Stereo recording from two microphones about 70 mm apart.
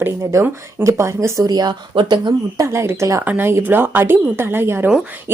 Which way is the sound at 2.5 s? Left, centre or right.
Right.